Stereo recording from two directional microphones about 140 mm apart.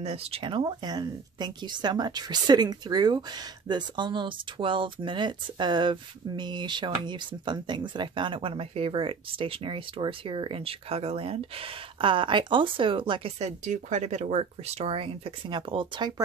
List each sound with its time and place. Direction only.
0.0 s speech: 45° right (ahead or behind)